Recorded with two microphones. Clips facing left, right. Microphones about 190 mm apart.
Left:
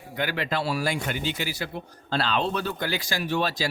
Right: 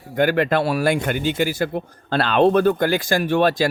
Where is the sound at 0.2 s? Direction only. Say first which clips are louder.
Right 10 dB; 50° right (ahead or behind).